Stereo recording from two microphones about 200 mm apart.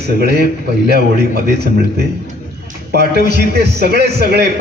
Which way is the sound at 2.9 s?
55° right (ahead or behind).